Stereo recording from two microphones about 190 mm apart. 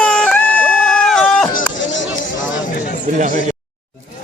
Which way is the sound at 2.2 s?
45° left (ahead or behind).